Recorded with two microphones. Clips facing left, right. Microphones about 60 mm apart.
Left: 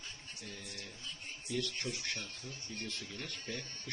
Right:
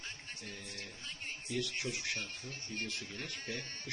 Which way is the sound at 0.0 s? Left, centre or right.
Right.